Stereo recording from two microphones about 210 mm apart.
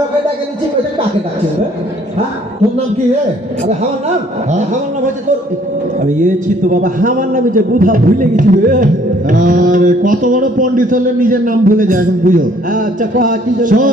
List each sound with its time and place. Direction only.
4.5 s a man's voice: 35° right (ahead or behind)